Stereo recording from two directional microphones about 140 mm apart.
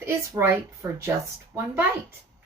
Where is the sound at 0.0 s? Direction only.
20° right (ahead or behind).